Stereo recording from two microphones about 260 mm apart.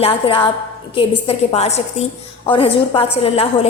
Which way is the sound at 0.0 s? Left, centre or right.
Left.